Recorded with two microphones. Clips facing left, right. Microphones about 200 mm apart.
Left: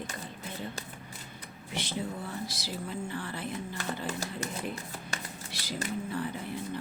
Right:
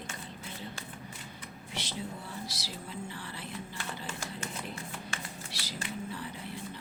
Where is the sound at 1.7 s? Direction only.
50° left (ahead or behind).